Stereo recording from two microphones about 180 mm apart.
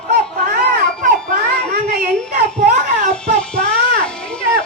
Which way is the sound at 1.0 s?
50° right (ahead or behind).